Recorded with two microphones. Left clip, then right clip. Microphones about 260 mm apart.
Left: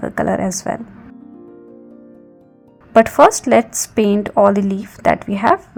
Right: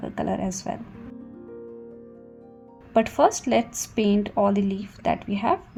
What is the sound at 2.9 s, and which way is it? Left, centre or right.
A woman's voice, left.